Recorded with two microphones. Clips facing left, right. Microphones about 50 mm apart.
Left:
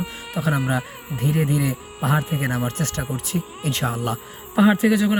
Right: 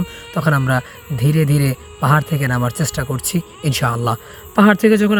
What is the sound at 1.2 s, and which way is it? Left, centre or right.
Speech, right.